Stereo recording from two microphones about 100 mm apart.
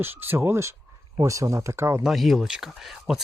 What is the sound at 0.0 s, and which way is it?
Speech, 20° right (ahead or behind).